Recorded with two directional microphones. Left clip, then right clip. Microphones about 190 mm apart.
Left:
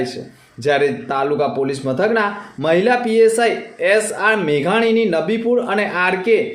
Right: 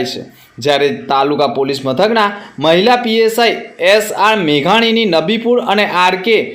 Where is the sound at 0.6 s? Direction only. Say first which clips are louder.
Right 4 dB; 15° right (ahead or behind).